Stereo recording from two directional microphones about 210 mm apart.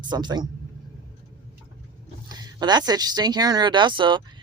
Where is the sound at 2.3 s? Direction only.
20° right (ahead or behind).